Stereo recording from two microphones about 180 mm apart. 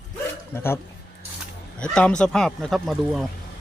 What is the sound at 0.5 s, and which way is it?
Speech, 15° left (ahead or behind).